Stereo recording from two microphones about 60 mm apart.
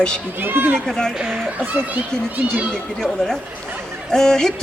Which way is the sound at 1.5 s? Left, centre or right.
Right.